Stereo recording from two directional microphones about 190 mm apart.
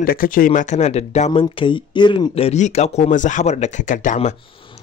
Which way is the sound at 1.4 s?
25° left (ahead or behind).